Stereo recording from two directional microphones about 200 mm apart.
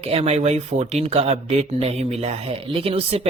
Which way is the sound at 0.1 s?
30° right (ahead or behind).